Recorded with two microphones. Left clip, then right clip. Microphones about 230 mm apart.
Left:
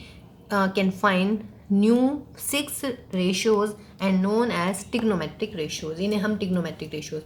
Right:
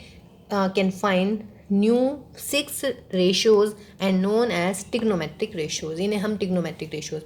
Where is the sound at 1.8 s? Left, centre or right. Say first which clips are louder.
Right 1 dB; centre.